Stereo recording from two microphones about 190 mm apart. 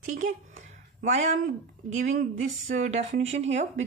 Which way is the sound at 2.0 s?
40° right (ahead or behind).